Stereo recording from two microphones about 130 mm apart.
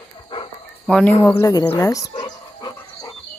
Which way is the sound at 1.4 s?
30° left (ahead or behind).